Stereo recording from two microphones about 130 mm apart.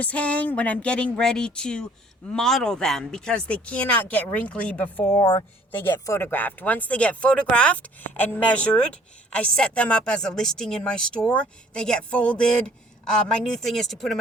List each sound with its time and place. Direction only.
0.0 s speech: 10° left (ahead or behind)
5.2 s speech: 35° left (ahead or behind)
5.7 s speech: 15° left (ahead or behind)